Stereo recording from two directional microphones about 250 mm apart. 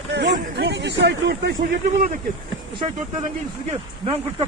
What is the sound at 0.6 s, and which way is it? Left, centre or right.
Speech, right.